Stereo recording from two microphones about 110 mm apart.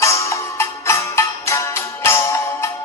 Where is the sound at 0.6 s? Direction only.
25° left (ahead or behind).